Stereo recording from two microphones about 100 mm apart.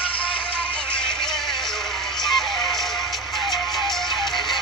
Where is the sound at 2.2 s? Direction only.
Centre (ahead or behind).